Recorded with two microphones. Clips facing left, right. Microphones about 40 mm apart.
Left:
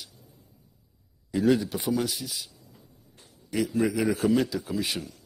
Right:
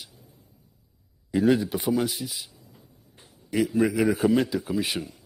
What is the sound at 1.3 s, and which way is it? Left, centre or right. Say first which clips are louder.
A man's voice: right 2 dB; centre.